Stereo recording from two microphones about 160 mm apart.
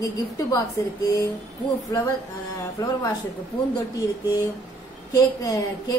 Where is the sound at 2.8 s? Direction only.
20° left (ahead or behind).